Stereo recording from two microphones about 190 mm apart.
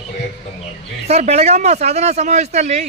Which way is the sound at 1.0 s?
35° right (ahead or behind).